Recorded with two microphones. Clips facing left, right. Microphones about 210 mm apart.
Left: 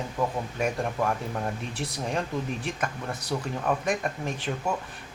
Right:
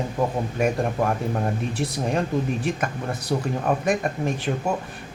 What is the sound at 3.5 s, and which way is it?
Speech, 40° right (ahead or behind).